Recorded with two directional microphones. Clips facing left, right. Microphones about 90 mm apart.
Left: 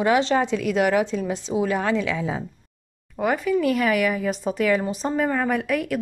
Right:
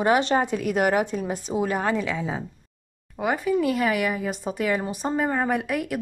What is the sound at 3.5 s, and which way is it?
A woman's voice, 15° right (ahead or behind).